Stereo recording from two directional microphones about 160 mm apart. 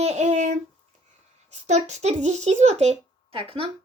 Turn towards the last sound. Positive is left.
turn(degrees=-35)  # may be behind; listen again after turning